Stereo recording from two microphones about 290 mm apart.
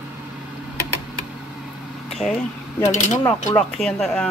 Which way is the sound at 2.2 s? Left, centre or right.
Centre.